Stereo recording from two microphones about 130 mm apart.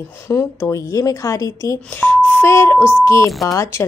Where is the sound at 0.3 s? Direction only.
20° left (ahead or behind).